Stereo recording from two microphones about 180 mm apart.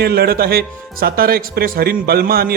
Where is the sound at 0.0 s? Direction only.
60° right (ahead or behind).